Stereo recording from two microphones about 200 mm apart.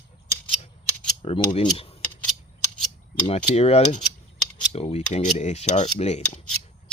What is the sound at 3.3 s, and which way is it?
Cutlery, 30° left (ahead or behind).